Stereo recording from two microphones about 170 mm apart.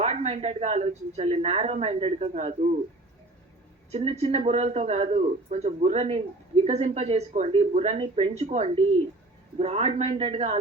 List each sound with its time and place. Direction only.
0.0 s a woman's voice: 40° right (ahead or behind)
3.9 s a woman's voice: 40° right (ahead or behind)